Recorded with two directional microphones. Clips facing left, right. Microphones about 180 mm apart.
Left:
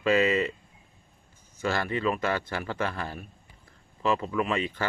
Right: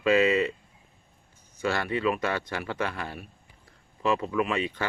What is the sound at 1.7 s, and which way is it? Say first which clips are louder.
Speech: right 1 dB; 15° right (ahead or behind).